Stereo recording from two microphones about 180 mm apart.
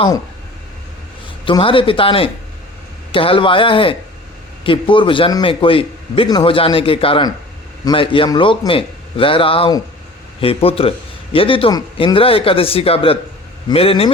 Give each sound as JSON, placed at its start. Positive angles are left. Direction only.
{"t": 1.5, "sound": "a man's voice", "side_deg": 30}